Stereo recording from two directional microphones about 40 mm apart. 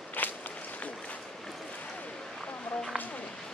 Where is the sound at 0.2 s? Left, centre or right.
Left.